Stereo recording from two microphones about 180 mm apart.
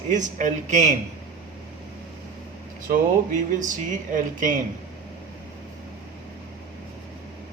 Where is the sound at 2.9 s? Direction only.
45° right (ahead or behind).